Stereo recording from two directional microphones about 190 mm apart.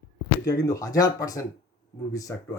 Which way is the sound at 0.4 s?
15° left (ahead or behind).